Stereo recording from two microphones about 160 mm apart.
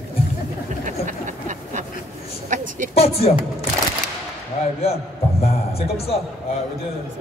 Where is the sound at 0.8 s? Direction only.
55° right (ahead or behind).